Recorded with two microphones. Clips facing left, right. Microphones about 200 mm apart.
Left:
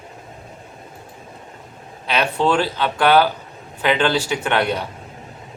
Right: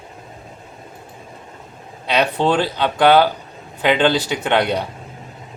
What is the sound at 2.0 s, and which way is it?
Speech, 20° right (ahead or behind).